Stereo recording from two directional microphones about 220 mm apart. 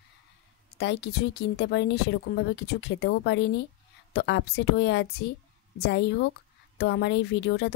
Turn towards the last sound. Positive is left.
turn(degrees=50)  # may be behind; listen again after turning